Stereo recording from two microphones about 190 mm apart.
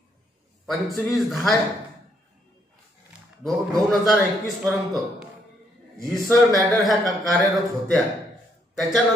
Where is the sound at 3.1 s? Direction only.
5° right (ahead or behind).